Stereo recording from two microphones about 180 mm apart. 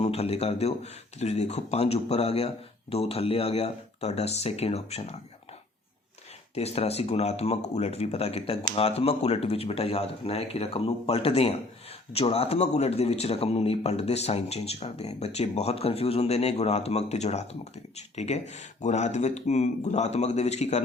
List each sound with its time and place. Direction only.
0.0 s a man's voice: 35° left (ahead or behind)
6.5 s a man's voice: 35° left (ahead or behind)